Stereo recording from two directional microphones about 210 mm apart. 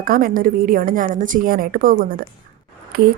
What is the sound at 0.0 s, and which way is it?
A woman's voice, 45° right (ahead or behind).